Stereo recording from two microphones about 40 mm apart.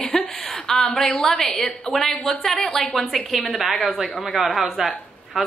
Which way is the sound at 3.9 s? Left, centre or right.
Centre.